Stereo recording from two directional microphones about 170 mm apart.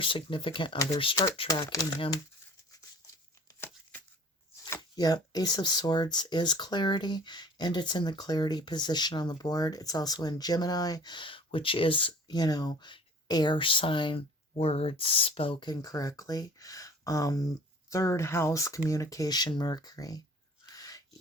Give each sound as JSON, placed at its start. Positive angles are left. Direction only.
{"t": 0.0, "sound": "speech", "side_deg": 30}
{"t": 4.7, "sound": "speech", "side_deg": 20}
{"t": 20.7, "sound": "a sound", "side_deg": 20}